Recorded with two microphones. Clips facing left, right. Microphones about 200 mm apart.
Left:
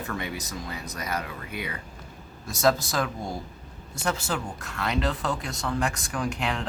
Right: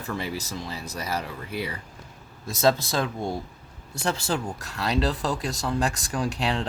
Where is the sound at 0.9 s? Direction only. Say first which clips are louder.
Right 2 dB; 30° right (ahead or behind).